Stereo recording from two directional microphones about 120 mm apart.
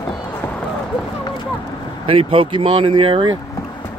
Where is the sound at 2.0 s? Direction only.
50° right (ahead or behind).